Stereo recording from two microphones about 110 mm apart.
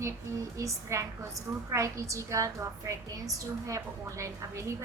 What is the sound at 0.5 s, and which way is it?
A woman's voice, 25° right (ahead or behind).